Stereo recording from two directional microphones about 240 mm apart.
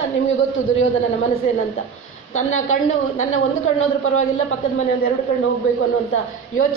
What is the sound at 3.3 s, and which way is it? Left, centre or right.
Speech, left.